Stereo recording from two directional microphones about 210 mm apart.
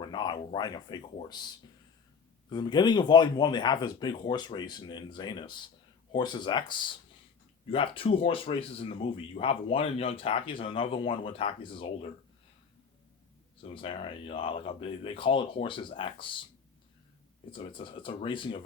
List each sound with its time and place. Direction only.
0.0 s speech: 20° left (ahead or behind)
2.5 s speech: 20° left (ahead or behind)
13.6 s speech: 25° left (ahead or behind)
17.5 s speech: 25° left (ahead or behind)